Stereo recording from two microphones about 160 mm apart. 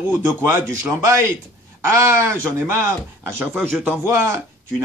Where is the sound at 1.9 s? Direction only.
15° right (ahead or behind).